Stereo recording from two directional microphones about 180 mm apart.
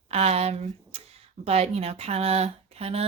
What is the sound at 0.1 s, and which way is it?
Speech, 35° right (ahead or behind).